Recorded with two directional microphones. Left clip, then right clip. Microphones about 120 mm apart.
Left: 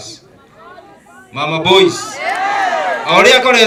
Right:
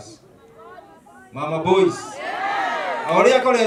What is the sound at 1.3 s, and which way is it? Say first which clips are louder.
A man's voice: left 7 dB; 25° left (ahead or behind).